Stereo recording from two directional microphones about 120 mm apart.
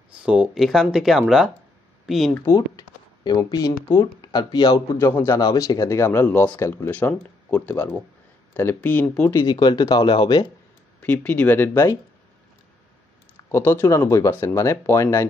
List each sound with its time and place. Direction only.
0.2 s speech: 10° right (ahead or behind)
3.3 s speech: 35° left (ahead or behind); by 9.4 s 15° left (ahead or behind)
9.4 s speech: 35° left (ahead or behind)
11.0 s speech: 15° left (ahead or behind)
13.5 s speech: 20° left (ahead or behind)